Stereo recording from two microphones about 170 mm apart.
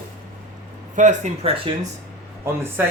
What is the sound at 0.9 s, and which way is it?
Speech, 45° right (ahead or behind).